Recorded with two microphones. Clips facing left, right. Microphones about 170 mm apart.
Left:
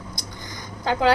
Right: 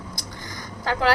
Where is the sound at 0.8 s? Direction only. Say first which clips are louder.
Left 2 dB; 20° left (ahead or behind).